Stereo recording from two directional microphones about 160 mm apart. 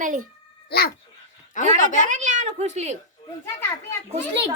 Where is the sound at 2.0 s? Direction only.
50° right (ahead or behind).